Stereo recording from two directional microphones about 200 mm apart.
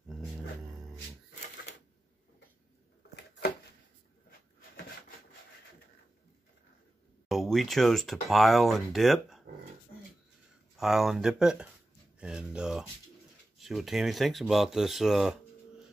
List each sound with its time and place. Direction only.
0.1 s dog: centre (ahead or behind)
3.2 s a sound: 55° left (ahead or behind)
4.6 s rub: 50° left (ahead or behind)
7.2 s speech: centre (ahead or behind)
10.8 s speech: centre (ahead or behind)